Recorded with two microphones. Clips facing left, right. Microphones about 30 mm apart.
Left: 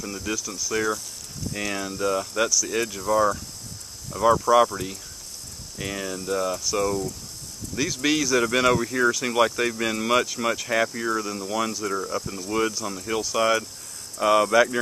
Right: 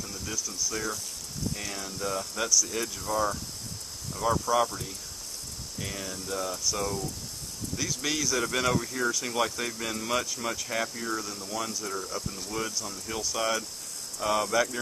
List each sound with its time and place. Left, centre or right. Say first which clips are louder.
0.0 s speech: left 6 dB; left